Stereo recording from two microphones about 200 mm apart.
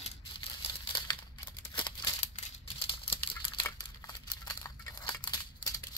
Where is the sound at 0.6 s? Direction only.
20° left (ahead or behind).